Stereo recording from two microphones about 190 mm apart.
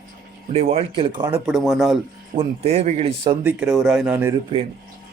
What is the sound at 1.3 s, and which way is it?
Speech, 5° right (ahead or behind).